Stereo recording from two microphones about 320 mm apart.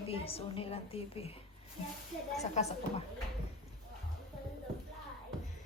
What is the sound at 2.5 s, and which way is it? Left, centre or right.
Speech, centre.